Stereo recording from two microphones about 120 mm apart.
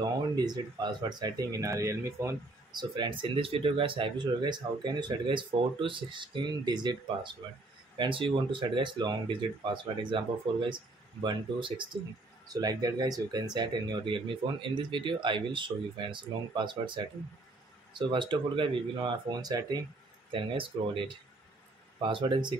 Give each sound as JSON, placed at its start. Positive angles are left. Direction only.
{"t": 0.0, "sound": "speech", "side_deg": -35}
{"t": 2.7, "sound": "speech", "side_deg": -35}
{"t": 20.2, "sound": "speech", "side_deg": -45}
{"t": 22.0, "sound": "speech", "side_deg": -40}